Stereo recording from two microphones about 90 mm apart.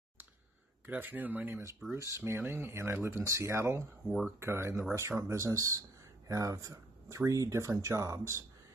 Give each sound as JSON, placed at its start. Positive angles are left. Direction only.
{"t": 0.8, "sound": "speech", "side_deg": -20}
{"t": 2.0, "sound": "speech", "side_deg": -30}